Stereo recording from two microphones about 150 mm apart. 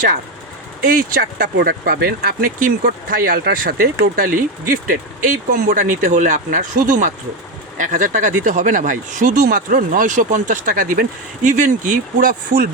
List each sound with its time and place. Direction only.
0.9 s speech: 75° right (ahead or behind)